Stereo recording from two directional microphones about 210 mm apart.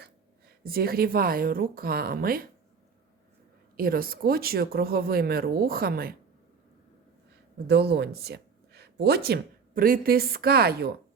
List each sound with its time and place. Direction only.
0.6 s speech: 45° right (ahead or behind)
3.8 s speech: 45° right (ahead or behind)
7.7 s speech: 50° right (ahead or behind)